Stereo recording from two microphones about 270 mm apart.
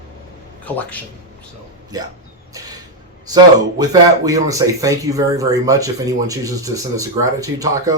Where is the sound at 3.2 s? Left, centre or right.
Centre.